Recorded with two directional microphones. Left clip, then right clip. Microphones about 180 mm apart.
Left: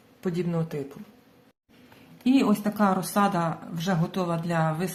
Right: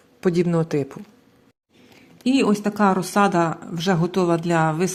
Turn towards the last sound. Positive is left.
turn(degrees=-35)  # may be behind; listen again after turning